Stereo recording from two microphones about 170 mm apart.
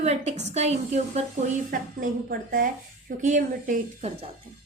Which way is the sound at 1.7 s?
55° right (ahead or behind).